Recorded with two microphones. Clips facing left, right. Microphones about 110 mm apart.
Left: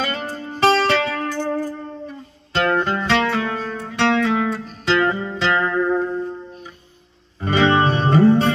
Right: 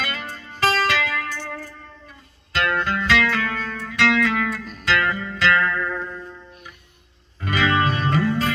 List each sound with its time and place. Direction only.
0.0 s music: 35° left (ahead or behind)
4.6 s music: 35° left (ahead or behind)